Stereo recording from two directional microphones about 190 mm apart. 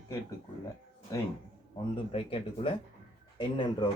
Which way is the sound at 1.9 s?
30° left (ahead or behind).